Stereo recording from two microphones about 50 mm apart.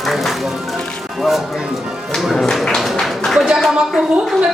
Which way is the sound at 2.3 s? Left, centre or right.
Centre.